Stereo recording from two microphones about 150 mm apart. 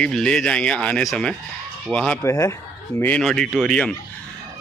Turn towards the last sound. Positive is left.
turn(degrees=5)  # may be behind; listen again after turning